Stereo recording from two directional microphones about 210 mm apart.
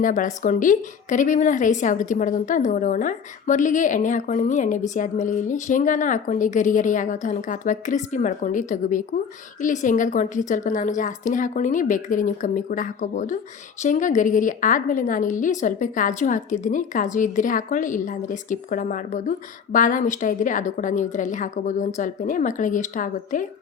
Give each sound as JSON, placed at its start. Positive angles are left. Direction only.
{"t": 0.0, "sound": "a woman's voice", "side_deg": 40}